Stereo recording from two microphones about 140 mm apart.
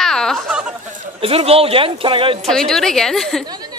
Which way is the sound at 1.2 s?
45° right (ahead or behind).